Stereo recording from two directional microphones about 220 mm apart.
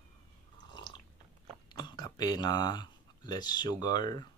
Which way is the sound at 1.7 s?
20° left (ahead or behind).